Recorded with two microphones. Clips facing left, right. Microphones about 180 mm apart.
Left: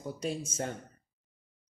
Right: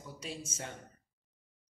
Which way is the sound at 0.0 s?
45° left (ahead or behind).